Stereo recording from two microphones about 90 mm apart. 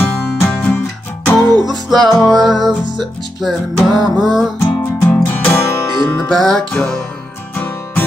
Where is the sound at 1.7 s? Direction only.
Centre (ahead or behind).